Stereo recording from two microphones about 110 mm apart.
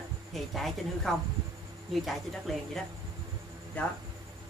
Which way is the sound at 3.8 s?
15° left (ahead or behind).